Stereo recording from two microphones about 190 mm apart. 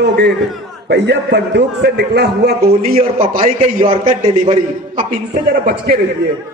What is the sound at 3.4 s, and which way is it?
Speech, 30° right (ahead or behind).